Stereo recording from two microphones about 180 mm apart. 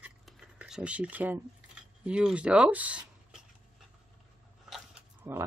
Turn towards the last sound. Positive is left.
turn(degrees=-10)  # may be behind; listen again after turning